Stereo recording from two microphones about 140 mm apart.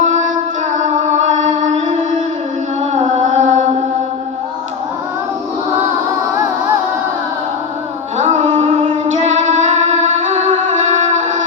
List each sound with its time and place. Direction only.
0.0 s music: 60° right (ahead or behind)
0.8 s chant: 60° right (ahead or behind)
3.2 s mantra: 60° right (ahead or behind)
8.2 s music: 55° right (ahead or behind)